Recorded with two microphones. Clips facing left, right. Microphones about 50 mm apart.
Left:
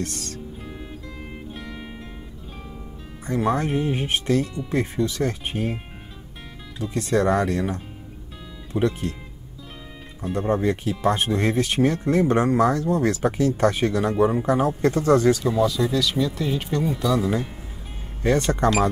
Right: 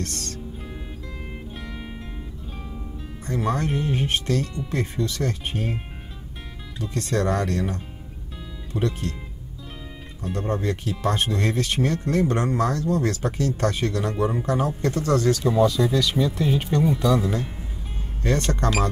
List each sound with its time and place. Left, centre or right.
0.0 s music: centre
1.5 s music: centre
3.3 s speech: centre
6.8 s speech: centre
10.3 s speech: centre
15.4 s speech: centre
18.2 s speech: centre